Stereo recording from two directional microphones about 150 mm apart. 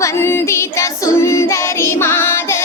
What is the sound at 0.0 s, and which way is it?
Child singing, 15° left (ahead or behind).